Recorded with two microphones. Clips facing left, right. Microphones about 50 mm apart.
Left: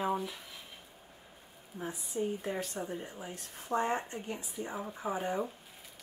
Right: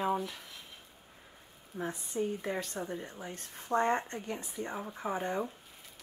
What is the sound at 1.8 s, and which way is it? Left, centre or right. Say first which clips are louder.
Speech: right 1 dB; centre.